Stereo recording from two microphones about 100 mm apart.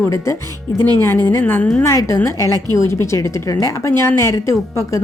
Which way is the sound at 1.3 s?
20° left (ahead or behind).